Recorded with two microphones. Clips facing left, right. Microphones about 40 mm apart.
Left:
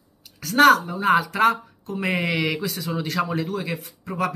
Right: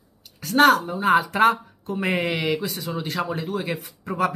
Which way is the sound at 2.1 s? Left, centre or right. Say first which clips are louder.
Even; centre.